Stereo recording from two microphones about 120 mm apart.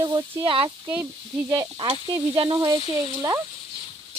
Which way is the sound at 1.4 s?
30° right (ahead or behind).